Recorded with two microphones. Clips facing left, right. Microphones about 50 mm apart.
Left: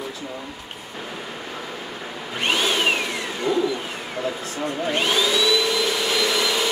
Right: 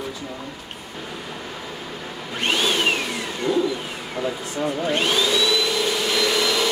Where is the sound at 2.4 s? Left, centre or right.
Centre.